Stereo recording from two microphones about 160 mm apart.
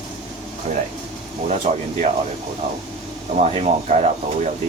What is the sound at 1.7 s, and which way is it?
Speech, 40° right (ahead or behind).